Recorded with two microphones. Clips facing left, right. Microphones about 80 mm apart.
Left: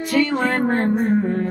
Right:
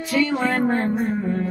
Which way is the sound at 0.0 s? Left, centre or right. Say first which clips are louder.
Left 2 dB; left.